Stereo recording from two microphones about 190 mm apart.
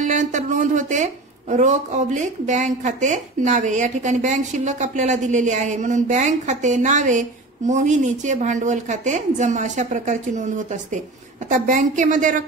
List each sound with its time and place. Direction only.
0.0 s a woman's voice: 40° right (ahead or behind)